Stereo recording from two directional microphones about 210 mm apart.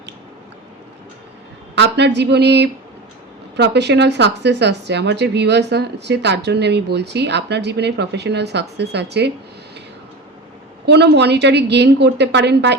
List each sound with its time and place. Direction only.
1.7 s speech: 55° right (ahead or behind)
10.8 s speech: 55° right (ahead or behind)